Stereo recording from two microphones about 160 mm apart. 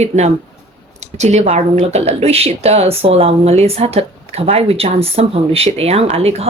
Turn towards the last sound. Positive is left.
turn(degrees=-40)  # may be behind; listen again after turning